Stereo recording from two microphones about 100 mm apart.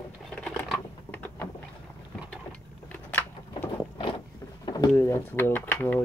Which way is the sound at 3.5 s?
50° left (ahead or behind).